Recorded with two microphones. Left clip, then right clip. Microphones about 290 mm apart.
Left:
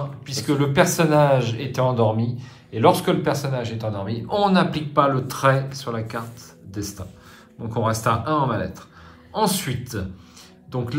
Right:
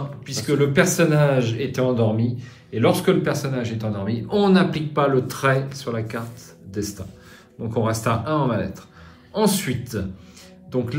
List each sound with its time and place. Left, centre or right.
0.3 s speech: centre